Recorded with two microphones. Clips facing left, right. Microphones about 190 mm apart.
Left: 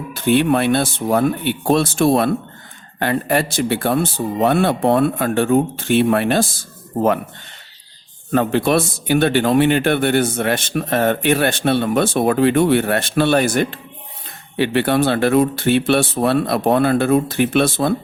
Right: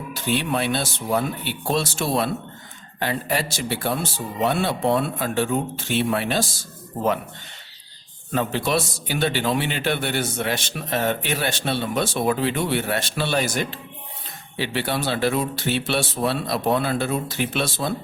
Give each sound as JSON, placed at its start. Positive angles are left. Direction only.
{"t": 0.1, "sound": "a man's voice", "side_deg": 55}
{"t": 8.3, "sound": "a man's voice", "side_deg": 55}